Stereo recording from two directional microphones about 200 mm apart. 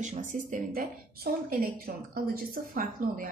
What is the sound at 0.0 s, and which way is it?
A woman's voice, 40° right (ahead or behind).